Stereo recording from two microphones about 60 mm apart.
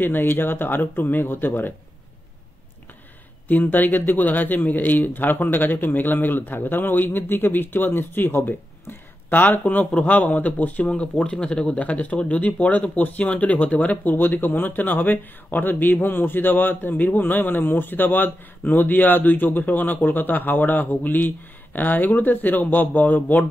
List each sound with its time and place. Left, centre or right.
0.0 s speech: left
3.4 s speech: left